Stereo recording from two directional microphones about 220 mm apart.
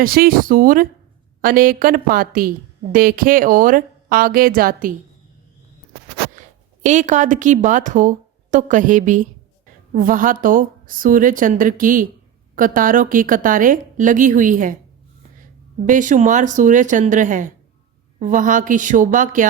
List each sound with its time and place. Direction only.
0.0 s a woman's voice: 40° right (ahead or behind)
6.8 s a woman's voice: 35° right (ahead or behind)
15.9 s a woman's voice: 35° right (ahead or behind)